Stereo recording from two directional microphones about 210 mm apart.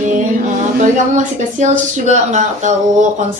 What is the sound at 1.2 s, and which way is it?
Speech, 35° right (ahead or behind).